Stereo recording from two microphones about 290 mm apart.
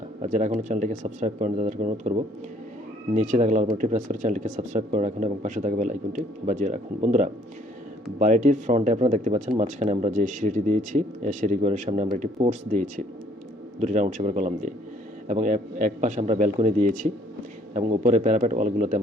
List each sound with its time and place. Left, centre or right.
0.2 s speech: right